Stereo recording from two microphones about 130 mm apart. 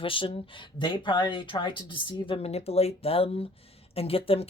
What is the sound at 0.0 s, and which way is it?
Speech, 40° left (ahead or behind).